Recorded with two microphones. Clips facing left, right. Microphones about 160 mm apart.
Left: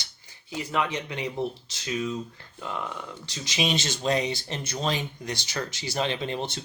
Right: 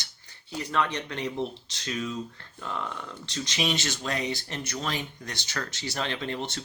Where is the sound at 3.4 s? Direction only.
20° left (ahead or behind).